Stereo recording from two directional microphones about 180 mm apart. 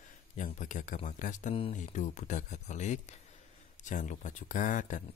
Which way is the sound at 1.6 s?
35° left (ahead or behind).